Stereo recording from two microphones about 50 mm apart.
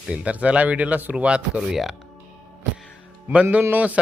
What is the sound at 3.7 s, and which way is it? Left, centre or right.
Speech, right.